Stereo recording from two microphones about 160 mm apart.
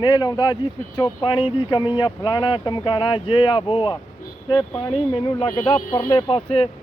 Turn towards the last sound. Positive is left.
turn(degrees=35)  # may be behind; listen again after turning